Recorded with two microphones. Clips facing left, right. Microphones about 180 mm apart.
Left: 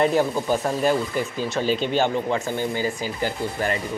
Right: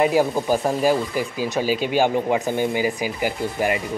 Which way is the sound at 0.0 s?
10° right (ahead or behind).